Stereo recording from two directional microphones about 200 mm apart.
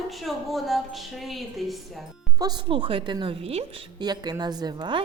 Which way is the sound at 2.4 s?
25° right (ahead or behind).